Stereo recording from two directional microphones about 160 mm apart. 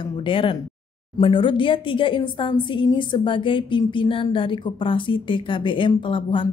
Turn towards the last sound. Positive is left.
turn(degrees=30)  # may be behind; listen again after turning